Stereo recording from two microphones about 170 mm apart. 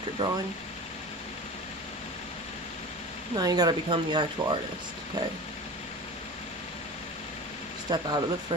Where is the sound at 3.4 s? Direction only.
25° right (ahead or behind).